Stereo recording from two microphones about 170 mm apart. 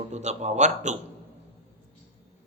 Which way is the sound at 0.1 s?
40° right (ahead or behind).